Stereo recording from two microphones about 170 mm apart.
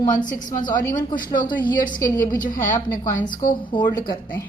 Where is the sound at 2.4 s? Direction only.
50° left (ahead or behind).